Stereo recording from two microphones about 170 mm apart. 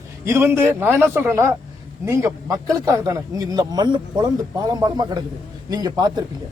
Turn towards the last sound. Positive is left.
turn(degrees=-25)  # may be behind; listen again after turning